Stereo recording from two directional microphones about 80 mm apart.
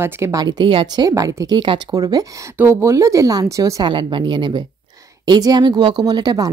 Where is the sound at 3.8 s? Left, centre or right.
Right.